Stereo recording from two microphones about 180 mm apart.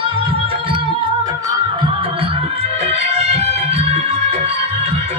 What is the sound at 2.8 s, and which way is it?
Music, 35° right (ahead or behind).